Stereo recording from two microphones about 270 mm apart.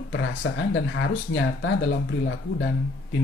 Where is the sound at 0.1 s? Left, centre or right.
Left.